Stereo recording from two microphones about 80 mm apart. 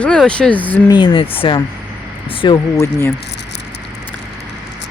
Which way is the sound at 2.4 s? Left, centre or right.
Left.